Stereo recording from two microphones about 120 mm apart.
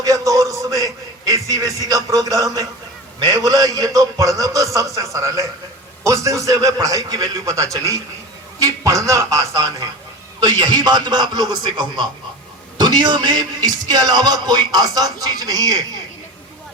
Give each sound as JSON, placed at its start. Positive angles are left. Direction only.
{"t": 0.0, "sound": "a man's voice", "side_deg": -30}